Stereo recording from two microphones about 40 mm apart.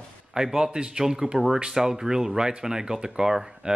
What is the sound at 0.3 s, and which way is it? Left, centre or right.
Speech, centre.